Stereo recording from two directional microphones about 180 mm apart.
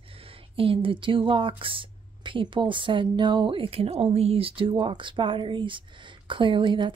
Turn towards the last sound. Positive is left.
turn(degrees=-25)  # may be behind; listen again after turning